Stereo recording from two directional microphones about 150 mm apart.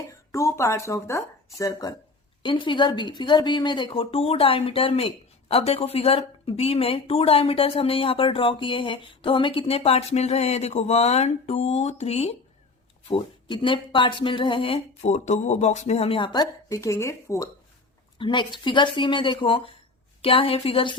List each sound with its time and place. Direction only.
0.1 s speech: 20° left (ahead or behind)
18.2 s speech: 30° left (ahead or behind)